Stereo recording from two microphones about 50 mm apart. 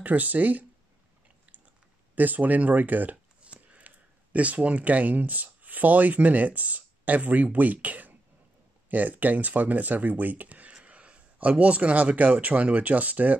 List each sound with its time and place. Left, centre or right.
0.0 s speech: right
2.1 s speech: right